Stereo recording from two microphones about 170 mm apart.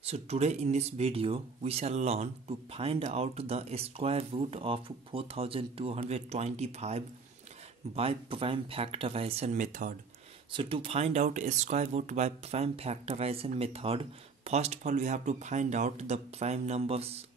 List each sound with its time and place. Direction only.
0.0 s speech: 40° right (ahead or behind)
10.5 s speech: 30° right (ahead or behind)